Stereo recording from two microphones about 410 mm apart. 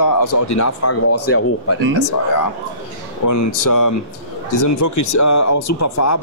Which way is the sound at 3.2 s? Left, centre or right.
Left.